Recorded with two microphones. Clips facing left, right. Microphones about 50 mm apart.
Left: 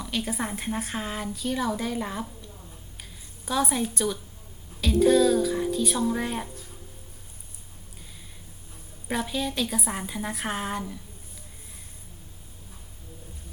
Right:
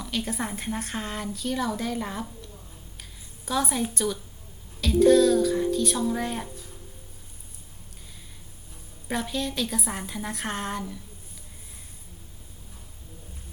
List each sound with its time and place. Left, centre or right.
0.0 s a woman's voice: centre
3.0 s a sound: centre
3.9 s a woman's voice: centre
9.0 s a woman's voice: centre